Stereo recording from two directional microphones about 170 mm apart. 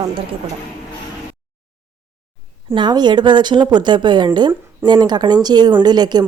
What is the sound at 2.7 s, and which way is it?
A woman's voice, 25° right (ahead or behind).